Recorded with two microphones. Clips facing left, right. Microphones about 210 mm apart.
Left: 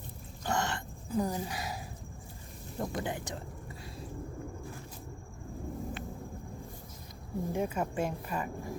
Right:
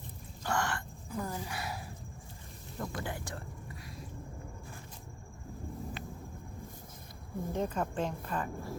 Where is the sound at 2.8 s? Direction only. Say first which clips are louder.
Left 4 dB; 20° left (ahead or behind).